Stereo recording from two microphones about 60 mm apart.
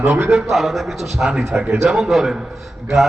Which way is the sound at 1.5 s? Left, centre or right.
Right.